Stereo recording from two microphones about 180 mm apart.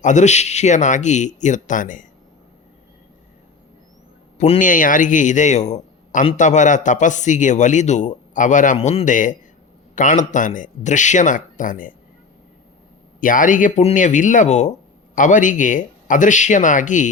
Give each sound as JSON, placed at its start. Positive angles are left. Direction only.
{"t": 0.0, "sound": "speech", "side_deg": 40}
{"t": 4.4, "sound": "speech", "side_deg": 40}
{"t": 13.1, "sound": "speech", "side_deg": 50}